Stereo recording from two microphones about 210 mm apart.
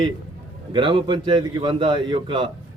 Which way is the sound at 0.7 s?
25° right (ahead or behind).